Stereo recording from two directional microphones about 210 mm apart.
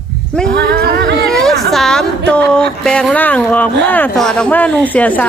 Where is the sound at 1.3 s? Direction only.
Centre (ahead or behind).